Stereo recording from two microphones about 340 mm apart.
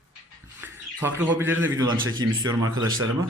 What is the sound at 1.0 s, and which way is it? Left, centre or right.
Speech, centre.